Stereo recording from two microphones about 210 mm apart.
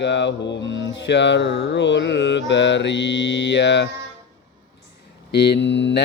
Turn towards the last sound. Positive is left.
turn(degrees=55)  # may be behind; listen again after turning